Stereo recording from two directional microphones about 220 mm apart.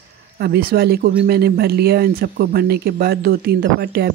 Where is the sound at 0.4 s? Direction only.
45° right (ahead or behind).